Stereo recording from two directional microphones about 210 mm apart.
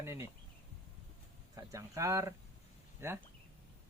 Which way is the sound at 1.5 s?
15° right (ahead or behind).